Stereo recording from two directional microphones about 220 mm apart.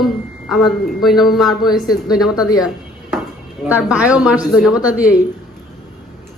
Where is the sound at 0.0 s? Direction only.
Centre (ahead or behind).